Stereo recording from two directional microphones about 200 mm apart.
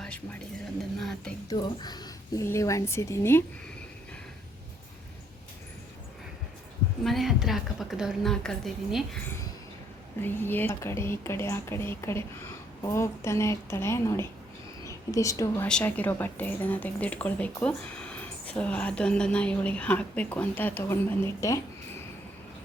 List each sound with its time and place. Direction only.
0.9 s a sound: centre (ahead or behind)
1.5 s a woman's voice: 20° left (ahead or behind)
7.0 s a woman's voice: centre (ahead or behind)
10.2 s a woman's voice: 10° left (ahead or behind)